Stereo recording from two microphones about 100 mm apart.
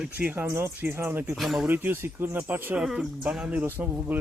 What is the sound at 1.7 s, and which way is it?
Speech, 25° right (ahead or behind).